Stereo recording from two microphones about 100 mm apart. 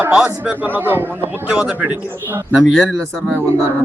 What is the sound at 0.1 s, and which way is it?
Speech, 5° right (ahead or behind).